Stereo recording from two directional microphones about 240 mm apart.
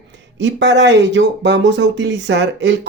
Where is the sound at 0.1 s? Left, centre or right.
Right.